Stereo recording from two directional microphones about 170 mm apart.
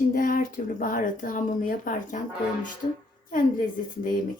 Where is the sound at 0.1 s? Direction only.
55° left (ahead or behind).